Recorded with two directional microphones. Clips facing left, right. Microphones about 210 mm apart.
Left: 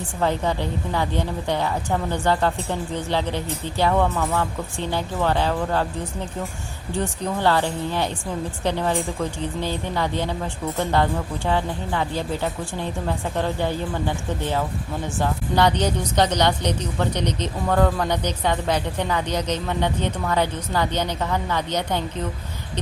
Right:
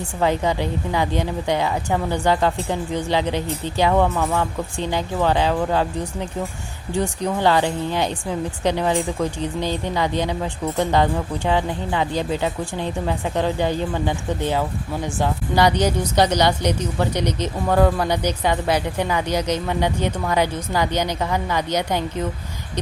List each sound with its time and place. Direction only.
0.2 s speech: 15° right (ahead or behind)
7.0 s speech: 15° right (ahead or behind)
15.2 s speech: 10° right (ahead or behind)